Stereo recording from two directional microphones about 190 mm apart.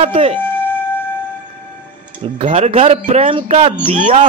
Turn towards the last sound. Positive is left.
turn(degrees=-40)  # may be behind; listen again after turning